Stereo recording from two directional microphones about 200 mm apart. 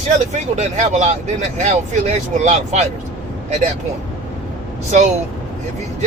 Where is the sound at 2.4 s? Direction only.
35° right (ahead or behind).